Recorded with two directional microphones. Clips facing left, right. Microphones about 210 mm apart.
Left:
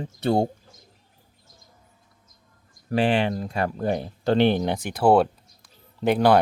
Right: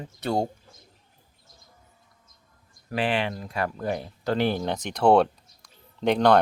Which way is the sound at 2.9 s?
30° left (ahead or behind).